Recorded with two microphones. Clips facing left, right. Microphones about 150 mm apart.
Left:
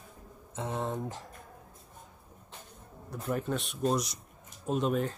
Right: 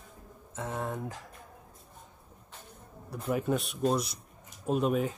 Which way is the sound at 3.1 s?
5° right (ahead or behind).